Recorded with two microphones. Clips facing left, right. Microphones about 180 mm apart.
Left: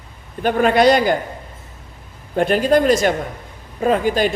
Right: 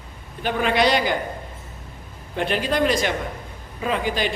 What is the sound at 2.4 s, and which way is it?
A woman's voice, 45° left (ahead or behind).